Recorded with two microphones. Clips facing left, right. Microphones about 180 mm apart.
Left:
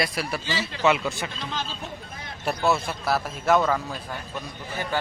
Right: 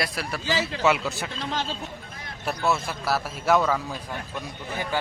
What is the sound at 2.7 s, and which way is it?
A man's voice, 5° right (ahead or behind).